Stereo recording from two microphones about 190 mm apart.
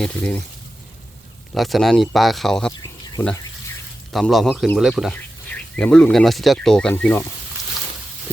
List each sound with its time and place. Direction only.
0.0 s speech: 5° left (ahead or behind)
1.5 s speech: centre (ahead or behind)
2.8 s a sound: 15° left (ahead or behind)
4.1 s speech: centre (ahead or behind)